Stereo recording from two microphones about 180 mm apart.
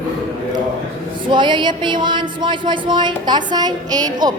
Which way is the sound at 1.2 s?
25° right (ahead or behind).